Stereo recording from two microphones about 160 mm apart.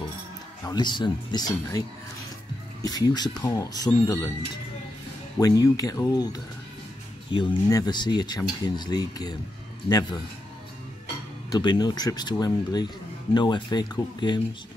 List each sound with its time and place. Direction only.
0.7 s speech: 30° left (ahead or behind)
2.8 s speech: 25° left (ahead or behind)
5.4 s speech: 25° left (ahead or behind)
11.5 s speech: 25° left (ahead or behind)